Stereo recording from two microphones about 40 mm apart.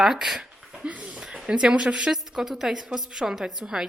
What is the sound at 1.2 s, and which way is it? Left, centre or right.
Speech, centre.